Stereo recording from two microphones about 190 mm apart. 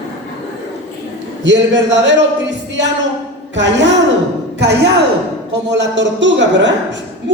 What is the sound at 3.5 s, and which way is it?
A woman's voice, 70° right (ahead or behind).